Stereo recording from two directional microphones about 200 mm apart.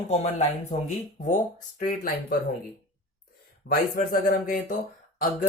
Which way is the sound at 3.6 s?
45° left (ahead or behind).